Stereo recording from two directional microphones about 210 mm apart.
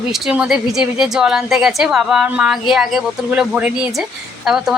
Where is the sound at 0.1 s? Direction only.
5° right (ahead or behind).